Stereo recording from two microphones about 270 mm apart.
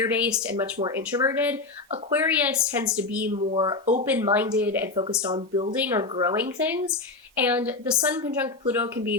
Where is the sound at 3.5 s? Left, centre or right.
Centre.